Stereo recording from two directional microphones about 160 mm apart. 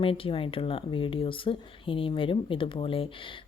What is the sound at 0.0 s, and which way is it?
Speech, 35° left (ahead or behind).